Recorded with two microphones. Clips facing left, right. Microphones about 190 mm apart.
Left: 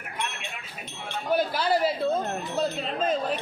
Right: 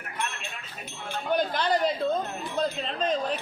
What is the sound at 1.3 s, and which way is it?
A man's voice, 5° left (ahead or behind).